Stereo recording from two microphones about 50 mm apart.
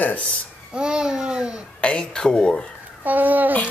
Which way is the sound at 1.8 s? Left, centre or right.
Left.